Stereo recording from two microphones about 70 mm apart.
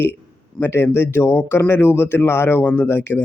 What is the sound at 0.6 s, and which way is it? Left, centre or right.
A man's voice, left.